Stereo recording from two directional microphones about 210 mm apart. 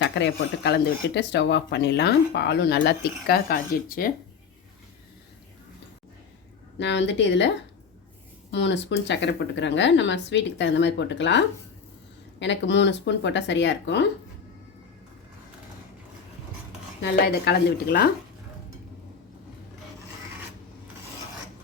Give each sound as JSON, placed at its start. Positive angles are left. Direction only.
{"t": 0.0, "sound": "speech", "side_deg": 60}
{"t": 6.7, "sound": "speech", "side_deg": 60}
{"t": 17.0, "sound": "speech", "side_deg": 50}